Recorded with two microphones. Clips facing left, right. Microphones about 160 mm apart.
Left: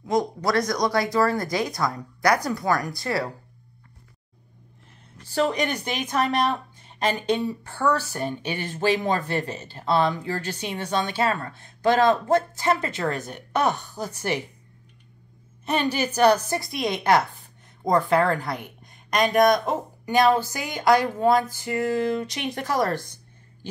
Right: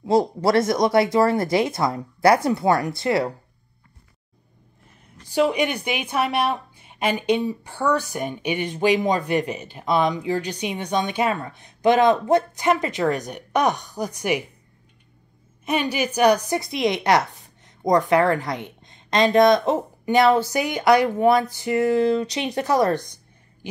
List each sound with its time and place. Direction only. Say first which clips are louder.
0.0 s speech: right 5 dB; 30° right (ahead or behind)
5.3 s a woman's voice: right 3 dB; 10° right (ahead or behind)
15.6 s a woman's voice: right 1 dB; 10° right (ahead or behind)